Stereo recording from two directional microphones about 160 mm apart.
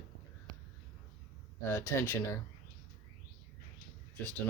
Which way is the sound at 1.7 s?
20° left (ahead or behind).